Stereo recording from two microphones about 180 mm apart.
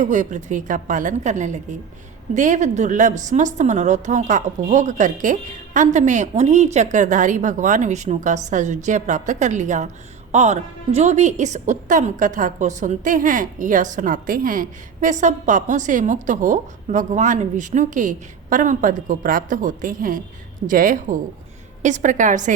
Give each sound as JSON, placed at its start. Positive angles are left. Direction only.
{"t": 0.0, "sound": "a woman's voice", "side_deg": -40}